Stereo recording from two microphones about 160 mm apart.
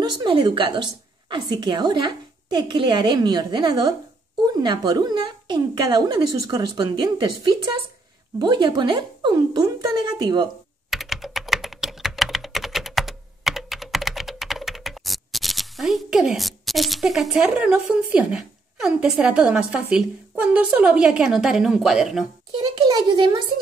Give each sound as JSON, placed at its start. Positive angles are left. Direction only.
{"t": 0.0, "sound": "speech", "side_deg": -30}
{"t": 10.9, "sound": "typing", "side_deg": 0}
{"t": 22.6, "sound": "speech", "side_deg": -25}